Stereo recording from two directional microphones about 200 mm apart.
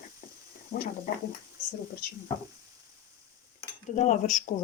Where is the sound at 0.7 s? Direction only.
50° left (ahead or behind).